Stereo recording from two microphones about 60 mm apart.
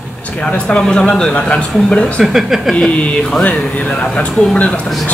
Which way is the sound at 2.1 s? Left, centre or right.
Centre.